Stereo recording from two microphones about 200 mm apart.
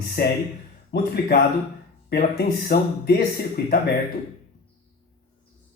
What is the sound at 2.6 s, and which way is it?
Speech, 50° left (ahead or behind).